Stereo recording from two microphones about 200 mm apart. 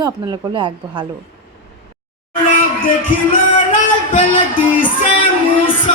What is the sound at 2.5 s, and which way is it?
Speech, 45° left (ahead or behind).